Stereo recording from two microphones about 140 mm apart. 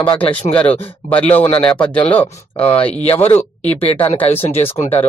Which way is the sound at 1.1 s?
10° left (ahead or behind).